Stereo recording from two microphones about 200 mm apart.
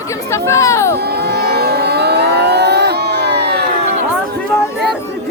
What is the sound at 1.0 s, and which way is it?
Vehicle, 55° right (ahead or behind).